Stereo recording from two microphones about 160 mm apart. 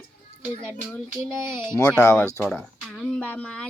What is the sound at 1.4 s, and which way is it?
Speech, 15° right (ahead or behind).